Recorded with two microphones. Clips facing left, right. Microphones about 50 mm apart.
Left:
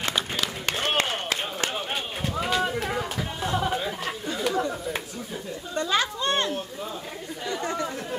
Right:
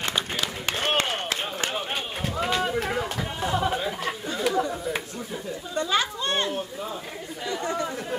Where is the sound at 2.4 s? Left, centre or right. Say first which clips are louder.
Even; centre.